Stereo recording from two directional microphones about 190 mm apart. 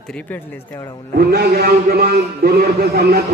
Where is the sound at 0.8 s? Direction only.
20° left (ahead or behind).